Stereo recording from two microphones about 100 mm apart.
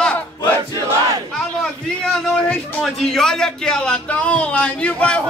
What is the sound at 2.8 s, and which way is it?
A man's voice, 5° left (ahead or behind).